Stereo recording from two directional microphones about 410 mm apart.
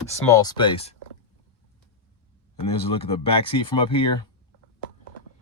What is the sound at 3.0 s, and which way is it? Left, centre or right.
Speech, centre.